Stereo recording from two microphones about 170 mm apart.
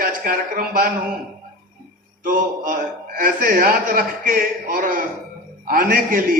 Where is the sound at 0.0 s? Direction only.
60° right (ahead or behind).